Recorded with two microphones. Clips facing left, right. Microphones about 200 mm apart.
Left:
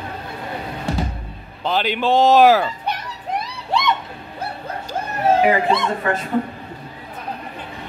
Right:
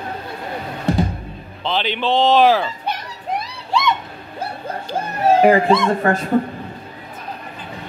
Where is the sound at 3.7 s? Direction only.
60° left (ahead or behind).